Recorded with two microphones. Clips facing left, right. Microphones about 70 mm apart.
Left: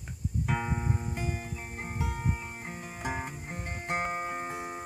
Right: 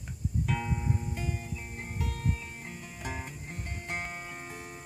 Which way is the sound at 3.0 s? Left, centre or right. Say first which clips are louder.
Left 5 dB; left.